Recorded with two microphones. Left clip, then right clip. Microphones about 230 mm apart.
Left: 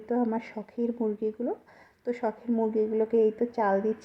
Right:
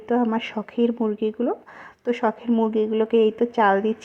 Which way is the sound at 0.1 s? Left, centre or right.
Centre.